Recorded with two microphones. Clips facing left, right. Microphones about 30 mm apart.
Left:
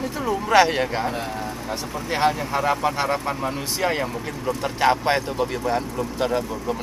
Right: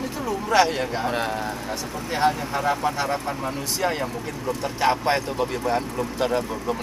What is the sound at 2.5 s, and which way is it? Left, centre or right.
Speech, left.